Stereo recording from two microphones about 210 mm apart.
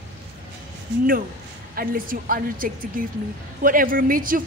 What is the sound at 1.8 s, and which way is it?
A woman's voice, 40° right (ahead or behind).